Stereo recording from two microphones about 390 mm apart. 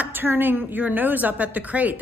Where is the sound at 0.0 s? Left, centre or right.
Centre.